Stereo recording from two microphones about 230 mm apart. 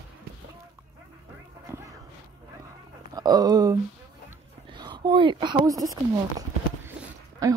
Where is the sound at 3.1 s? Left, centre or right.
Centre.